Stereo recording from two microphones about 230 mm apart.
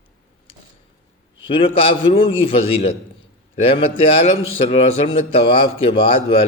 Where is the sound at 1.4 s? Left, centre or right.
Left.